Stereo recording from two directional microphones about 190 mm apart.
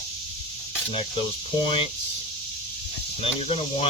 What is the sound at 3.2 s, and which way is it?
Speech, 30° left (ahead or behind).